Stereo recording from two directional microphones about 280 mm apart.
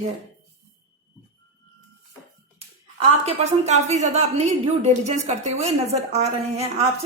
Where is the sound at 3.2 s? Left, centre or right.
Right.